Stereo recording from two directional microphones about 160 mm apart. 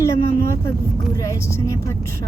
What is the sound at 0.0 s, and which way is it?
Speech, 20° left (ahead or behind).